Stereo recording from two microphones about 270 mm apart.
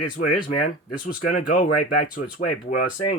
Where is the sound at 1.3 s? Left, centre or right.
Left.